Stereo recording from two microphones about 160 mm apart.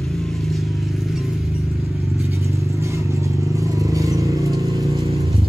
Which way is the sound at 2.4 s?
20° right (ahead or behind).